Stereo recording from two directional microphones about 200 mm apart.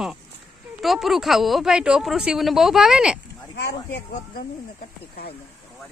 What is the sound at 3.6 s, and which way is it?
Speech, 55° left (ahead or behind).